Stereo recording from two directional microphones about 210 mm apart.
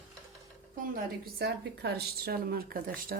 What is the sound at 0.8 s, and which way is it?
A woman's voice, 45° right (ahead or behind).